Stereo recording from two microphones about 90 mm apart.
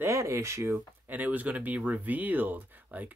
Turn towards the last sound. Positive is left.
turn(degrees=-20)  # may be behind; listen again after turning